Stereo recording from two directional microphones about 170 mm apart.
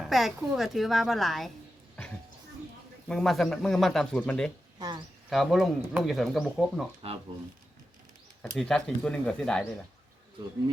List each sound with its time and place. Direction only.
0.0 s a woman's voice: centre (ahead or behind)
3.1 s a woman's voice: centre (ahead or behind)
4.8 s speech: 25° right (ahead or behind)
5.3 s a woman's voice: centre (ahead or behind)
8.5 s a woman's voice: 5° left (ahead or behind)